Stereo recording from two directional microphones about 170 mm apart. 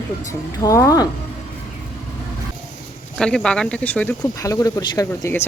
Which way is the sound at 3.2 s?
5° left (ahead or behind).